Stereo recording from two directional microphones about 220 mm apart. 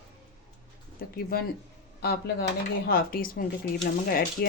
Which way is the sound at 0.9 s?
45° left (ahead or behind).